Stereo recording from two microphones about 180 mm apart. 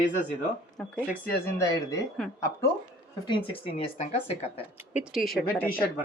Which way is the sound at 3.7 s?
35° left (ahead or behind).